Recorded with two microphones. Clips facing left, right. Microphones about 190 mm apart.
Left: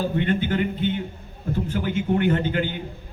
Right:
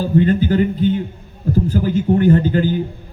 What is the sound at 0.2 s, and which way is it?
A man's voice, 35° right (ahead or behind).